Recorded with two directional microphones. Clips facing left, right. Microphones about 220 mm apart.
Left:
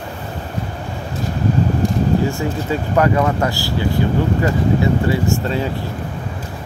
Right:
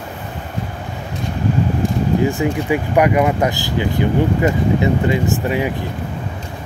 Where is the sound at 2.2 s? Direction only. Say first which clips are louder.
Right 3 dB; 15° right (ahead or behind).